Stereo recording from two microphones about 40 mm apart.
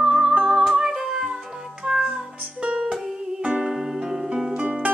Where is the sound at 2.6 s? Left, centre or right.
Right.